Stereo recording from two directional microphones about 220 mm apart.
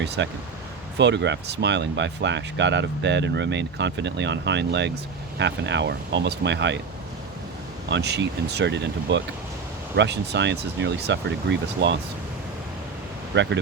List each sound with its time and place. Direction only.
0.0 s speech: 50° right (ahead or behind)
7.9 s speech: 50° right (ahead or behind)
13.3 s speech: 55° right (ahead or behind)